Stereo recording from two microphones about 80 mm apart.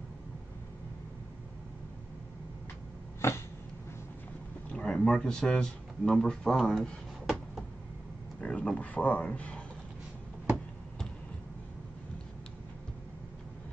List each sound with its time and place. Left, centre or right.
3.2 s a sound: left
4.6 s speech: centre
8.4 s speech: centre